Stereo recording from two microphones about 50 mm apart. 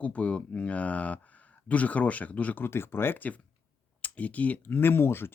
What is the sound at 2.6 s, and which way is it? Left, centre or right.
Speech, left.